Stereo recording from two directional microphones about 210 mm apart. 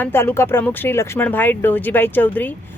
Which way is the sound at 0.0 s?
10° left (ahead or behind).